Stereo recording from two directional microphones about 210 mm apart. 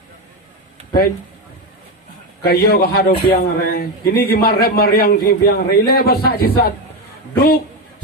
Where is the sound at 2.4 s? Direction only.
50° left (ahead or behind).